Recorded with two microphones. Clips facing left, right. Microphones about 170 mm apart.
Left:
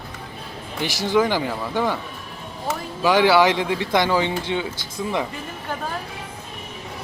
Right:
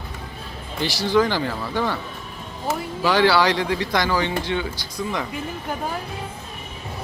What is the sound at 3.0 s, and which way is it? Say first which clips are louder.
Speech: left 2 dB; 20° left (ahead or behind).